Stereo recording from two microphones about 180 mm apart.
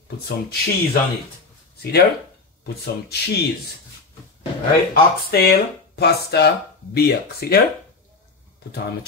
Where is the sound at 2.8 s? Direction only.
60° left (ahead or behind).